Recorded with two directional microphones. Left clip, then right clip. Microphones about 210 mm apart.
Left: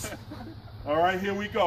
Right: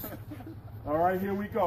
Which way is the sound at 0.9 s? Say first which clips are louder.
Left 3 dB; 15° left (ahead or behind).